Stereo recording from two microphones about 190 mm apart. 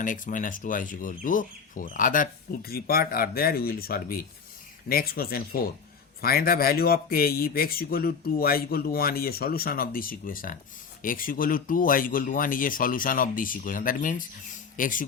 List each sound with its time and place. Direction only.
0.0 s speech: 45° left (ahead or behind)